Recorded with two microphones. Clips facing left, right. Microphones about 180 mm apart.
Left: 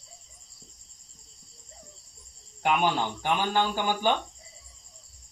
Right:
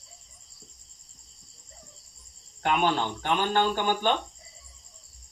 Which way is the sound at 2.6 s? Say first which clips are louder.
Even; 10° left (ahead or behind).